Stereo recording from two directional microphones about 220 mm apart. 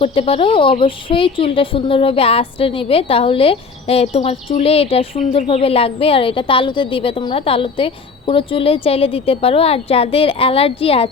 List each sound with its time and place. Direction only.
0.0 s a woman's voice: 25° left (ahead or behind)